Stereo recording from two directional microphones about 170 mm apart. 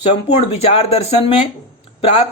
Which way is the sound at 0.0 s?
35° left (ahead or behind).